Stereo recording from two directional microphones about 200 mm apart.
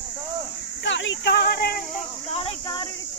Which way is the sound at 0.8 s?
65° left (ahead or behind).